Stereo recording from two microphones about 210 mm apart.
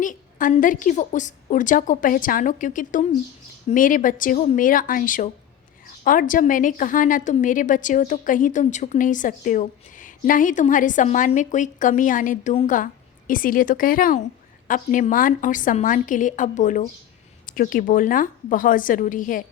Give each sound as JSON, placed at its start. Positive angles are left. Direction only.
{"t": 0.0, "sound": "a woman's voice", "side_deg": 40}